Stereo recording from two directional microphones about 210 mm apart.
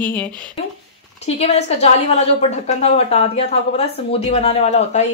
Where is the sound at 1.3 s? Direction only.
30° left (ahead or behind).